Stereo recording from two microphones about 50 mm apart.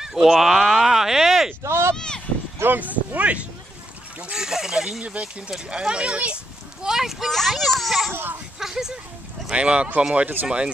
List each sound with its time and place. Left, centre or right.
0.0 s speech: centre
2.0 s a sound: centre
2.6 s speech: right
4.2 s speech: centre
5.0 s speech: right
6.8 s speech: centre
8.1 s speech: right
8.5 s speech: centre
9.5 s speech: right